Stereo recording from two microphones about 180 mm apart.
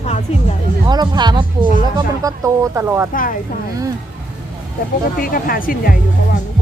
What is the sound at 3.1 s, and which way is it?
Speech, 50° left (ahead or behind).